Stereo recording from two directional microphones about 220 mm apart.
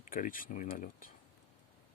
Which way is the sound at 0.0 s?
40° left (ahead or behind).